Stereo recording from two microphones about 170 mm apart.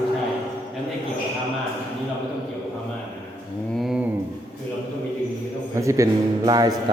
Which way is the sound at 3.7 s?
Centre (ahead or behind).